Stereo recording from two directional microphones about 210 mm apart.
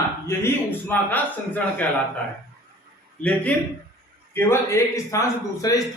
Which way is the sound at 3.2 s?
5° left (ahead or behind).